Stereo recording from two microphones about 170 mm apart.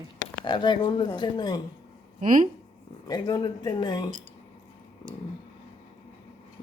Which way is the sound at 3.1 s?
25° left (ahead or behind).